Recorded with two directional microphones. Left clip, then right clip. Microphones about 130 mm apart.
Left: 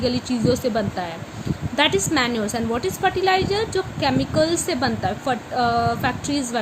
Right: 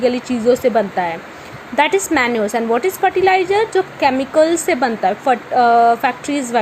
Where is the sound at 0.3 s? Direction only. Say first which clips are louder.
Right 7 dB; 20° right (ahead or behind).